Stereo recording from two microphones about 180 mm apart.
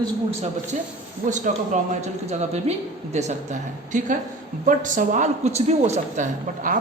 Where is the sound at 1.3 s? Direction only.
45° right (ahead or behind).